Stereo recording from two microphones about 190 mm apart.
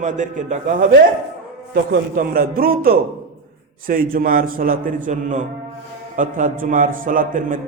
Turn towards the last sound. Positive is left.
turn(degrees=-45)  # may be behind; listen again after turning